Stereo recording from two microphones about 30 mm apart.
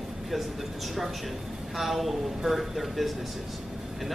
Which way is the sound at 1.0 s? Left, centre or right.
Centre.